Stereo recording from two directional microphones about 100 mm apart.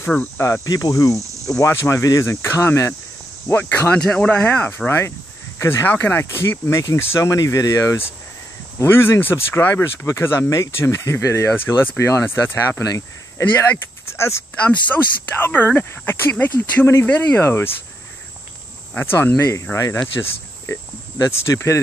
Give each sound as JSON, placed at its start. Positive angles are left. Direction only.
{"t": 0.4, "sound": "speech", "side_deg": 30}
{"t": 18.9, "sound": "speech", "side_deg": 20}